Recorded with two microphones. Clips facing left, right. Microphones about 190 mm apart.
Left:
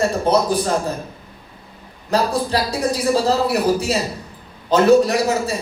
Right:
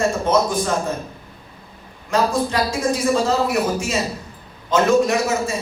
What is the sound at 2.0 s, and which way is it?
A man's voice, 35° left (ahead or behind).